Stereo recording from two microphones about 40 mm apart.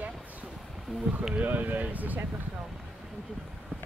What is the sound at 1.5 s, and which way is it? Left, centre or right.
Speech, right.